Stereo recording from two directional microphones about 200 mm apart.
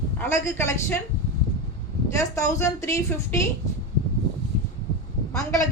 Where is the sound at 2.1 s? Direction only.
15° left (ahead or behind).